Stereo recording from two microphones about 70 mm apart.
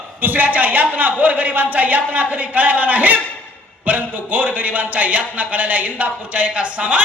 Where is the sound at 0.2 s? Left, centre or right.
Right.